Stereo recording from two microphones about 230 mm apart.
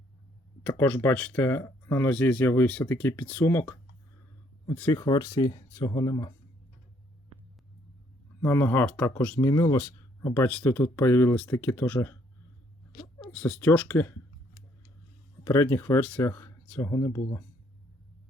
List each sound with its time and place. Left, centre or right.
0.6 s speech: centre
8.4 s speech: centre
13.3 s speech: centre
15.4 s speech: centre